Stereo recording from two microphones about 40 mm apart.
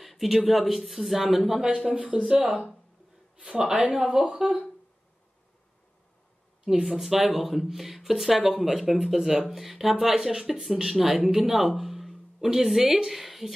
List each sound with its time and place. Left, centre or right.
0.0 s speech: centre
2.0 s speech: right
3.5 s speech: centre
4.4 s a woman's voice: centre
6.8 s speech: centre
11.1 s a woman's voice: centre
11.7 s a sound: centre
12.4 s a woman's voice: centre